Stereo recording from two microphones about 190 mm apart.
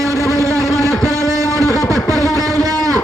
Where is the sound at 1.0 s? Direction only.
15° right (ahead or behind).